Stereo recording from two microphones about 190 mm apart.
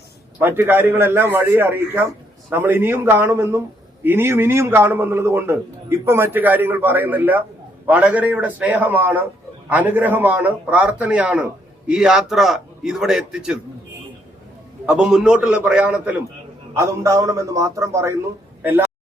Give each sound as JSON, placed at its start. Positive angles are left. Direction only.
{"t": 0.3, "sound": "a man's voice", "side_deg": -10}
{"t": 14.8, "sound": "a man's voice", "side_deg": -5}